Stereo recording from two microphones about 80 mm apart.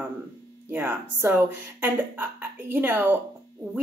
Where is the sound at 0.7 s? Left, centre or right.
Right.